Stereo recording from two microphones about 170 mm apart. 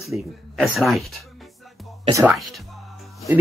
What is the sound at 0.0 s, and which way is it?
Speech, centre (ahead or behind).